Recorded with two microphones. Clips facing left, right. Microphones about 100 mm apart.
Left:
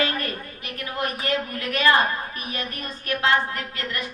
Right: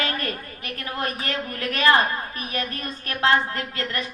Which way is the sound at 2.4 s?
30° left (ahead or behind).